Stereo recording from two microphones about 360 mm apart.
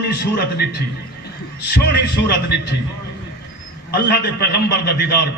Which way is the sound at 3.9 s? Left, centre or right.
Left.